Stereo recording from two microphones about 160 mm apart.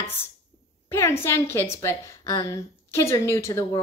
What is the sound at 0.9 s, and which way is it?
A woman's voice, 15° left (ahead or behind).